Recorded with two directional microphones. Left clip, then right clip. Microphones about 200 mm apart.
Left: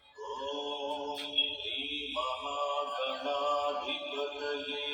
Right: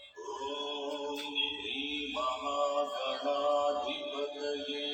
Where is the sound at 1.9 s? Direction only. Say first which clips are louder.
Right 2 dB; centre (ahead or behind).